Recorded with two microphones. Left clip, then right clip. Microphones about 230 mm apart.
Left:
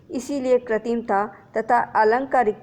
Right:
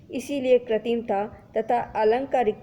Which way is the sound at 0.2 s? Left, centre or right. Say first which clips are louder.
Even; left.